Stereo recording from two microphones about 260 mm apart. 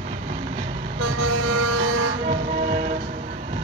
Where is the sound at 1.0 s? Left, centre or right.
Right.